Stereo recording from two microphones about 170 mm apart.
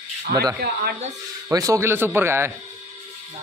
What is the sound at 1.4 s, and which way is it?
Speech, 20° right (ahead or behind).